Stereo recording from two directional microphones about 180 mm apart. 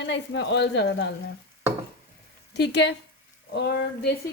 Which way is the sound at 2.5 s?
70° left (ahead or behind).